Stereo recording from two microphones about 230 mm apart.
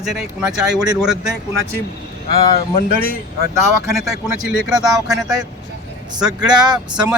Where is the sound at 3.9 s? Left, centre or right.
Centre.